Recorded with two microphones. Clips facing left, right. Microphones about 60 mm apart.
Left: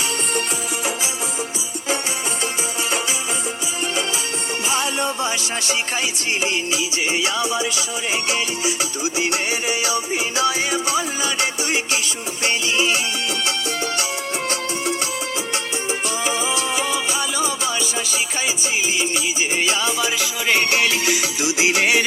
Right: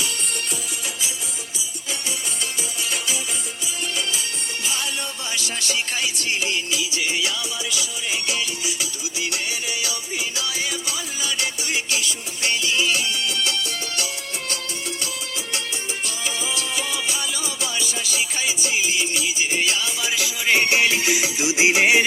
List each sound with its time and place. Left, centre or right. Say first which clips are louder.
4.7 s music: left 10 dB; centre
9.5 s music: left 6 dB; centre
16.0 s music: left 6 dB; centre